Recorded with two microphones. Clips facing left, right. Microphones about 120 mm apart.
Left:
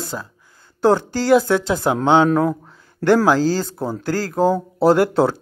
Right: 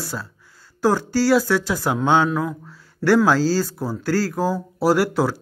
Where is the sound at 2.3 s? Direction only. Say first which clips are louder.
Left 6 dB; 45° left (ahead or behind).